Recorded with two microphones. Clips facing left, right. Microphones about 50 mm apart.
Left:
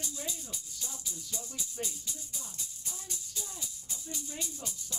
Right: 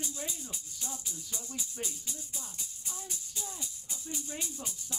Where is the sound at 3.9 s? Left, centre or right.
Right.